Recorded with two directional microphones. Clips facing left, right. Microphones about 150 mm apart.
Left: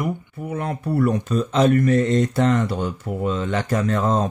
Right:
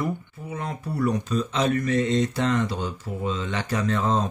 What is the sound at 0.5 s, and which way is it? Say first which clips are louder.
Speech: left 6 dB; 55° left (ahead or behind).